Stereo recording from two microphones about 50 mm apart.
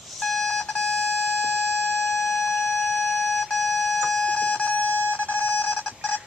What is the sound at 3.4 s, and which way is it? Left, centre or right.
Music, centre.